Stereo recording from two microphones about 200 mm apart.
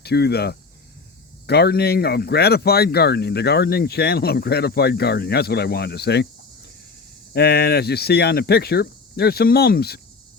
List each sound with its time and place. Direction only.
0.0 s speech: 55° left (ahead or behind)
7.3 s speech: 55° left (ahead or behind)